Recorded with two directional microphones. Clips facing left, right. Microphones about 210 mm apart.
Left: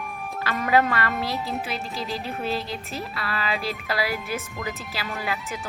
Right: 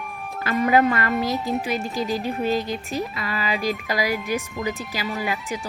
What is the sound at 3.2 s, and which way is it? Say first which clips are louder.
Speech: right 1 dB; 15° right (ahead or behind).